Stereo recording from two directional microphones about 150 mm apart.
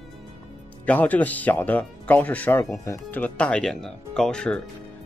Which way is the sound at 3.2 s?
10° left (ahead or behind).